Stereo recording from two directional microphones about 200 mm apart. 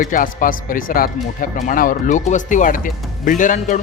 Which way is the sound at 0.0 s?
40° left (ahead or behind).